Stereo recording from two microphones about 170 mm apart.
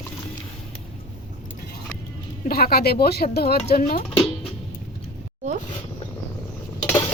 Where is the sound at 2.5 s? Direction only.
65° left (ahead or behind).